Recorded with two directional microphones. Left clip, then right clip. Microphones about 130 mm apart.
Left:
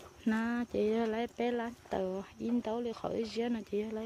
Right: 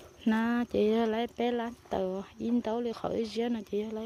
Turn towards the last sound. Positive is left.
turn(degrees=-20)  # may be behind; listen again after turning